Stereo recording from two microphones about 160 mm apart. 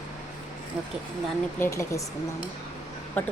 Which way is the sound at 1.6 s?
20° left (ahead or behind).